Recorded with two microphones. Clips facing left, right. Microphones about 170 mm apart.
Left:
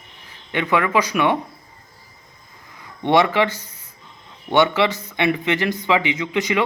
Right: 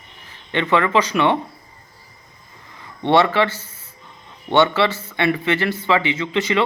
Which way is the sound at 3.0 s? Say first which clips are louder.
Right 1 dB; 15° left (ahead or behind).